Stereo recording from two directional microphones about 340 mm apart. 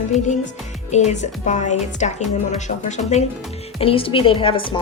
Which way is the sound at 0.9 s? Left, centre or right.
Centre.